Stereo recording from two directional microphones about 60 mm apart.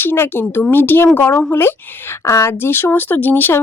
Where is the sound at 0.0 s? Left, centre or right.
Left.